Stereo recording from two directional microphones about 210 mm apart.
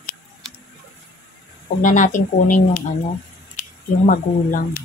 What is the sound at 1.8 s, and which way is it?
Speech, 35° left (ahead or behind).